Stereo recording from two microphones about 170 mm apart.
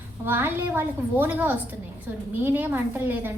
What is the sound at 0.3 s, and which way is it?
A woman's voice, 10° right (ahead or behind).